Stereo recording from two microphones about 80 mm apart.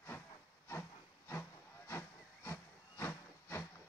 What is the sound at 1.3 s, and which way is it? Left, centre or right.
Hiss, left.